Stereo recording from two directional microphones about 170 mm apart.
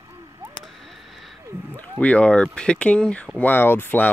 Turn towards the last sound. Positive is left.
turn(degrees=10)  # may be behind; listen again after turning